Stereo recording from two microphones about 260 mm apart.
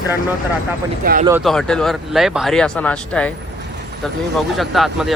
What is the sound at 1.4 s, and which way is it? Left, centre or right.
Speech, centre.